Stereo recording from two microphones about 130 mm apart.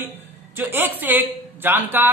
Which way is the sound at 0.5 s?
15° right (ahead or behind).